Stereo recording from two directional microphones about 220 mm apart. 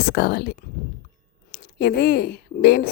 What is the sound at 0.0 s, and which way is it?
A woman's voice, 45° left (ahead or behind).